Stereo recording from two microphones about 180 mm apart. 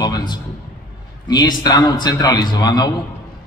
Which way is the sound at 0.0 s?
20° left (ahead or behind).